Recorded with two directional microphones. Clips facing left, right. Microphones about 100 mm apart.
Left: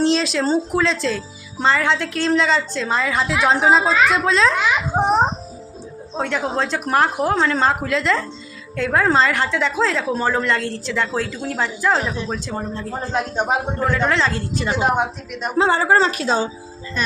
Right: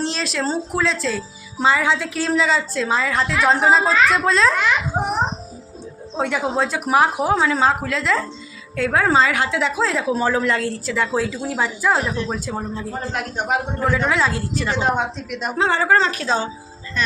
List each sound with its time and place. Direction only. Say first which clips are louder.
0.0 s speech: left 5 dB; centre (ahead or behind)
6.1 s a woman's voice: right 1 dB; 10° right (ahead or behind)
13.1 s a man's voice: left 3 dB; 20° left (ahead or behind)
13.7 s a woman's voice: right 1 dB; 10° right (ahead or behind)
14.6 s a woman's voice: left 2 dB; 15° left (ahead or behind)
15.3 s speech: left 3 dB; centre (ahead or behind)
15.8 s a woman's voice: left 1 dB; 15° left (ahead or behind)